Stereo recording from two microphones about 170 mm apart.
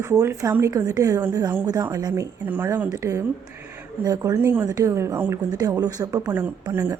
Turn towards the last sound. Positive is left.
turn(degrees=-10)  # may be behind; listen again after turning